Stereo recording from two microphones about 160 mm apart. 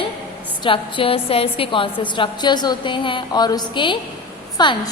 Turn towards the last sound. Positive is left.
turn(degrees=25)  # may be behind; listen again after turning